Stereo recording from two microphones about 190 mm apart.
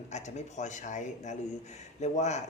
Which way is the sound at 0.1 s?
35° left (ahead or behind).